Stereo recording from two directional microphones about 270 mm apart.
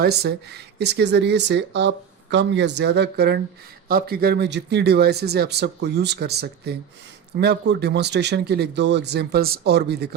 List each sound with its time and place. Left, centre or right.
0.0 s speech: right